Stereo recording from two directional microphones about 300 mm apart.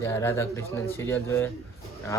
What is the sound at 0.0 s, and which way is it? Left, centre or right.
A man's voice, centre.